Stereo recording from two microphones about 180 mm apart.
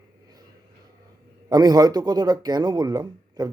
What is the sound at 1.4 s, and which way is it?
Speech, 20° right (ahead or behind).